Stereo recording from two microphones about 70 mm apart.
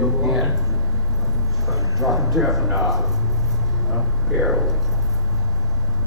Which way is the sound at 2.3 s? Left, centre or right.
Centre.